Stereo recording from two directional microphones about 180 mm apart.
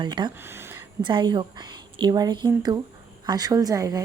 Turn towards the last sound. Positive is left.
turn(degrees=-20)  # may be behind; listen again after turning